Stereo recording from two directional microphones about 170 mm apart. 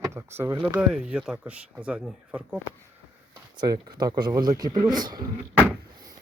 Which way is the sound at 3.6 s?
25° right (ahead or behind).